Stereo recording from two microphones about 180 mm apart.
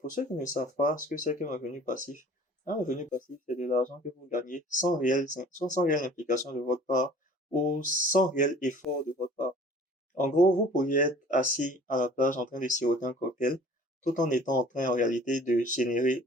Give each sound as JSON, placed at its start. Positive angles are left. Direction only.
{"t": 0.1, "sound": "speech", "side_deg": 45}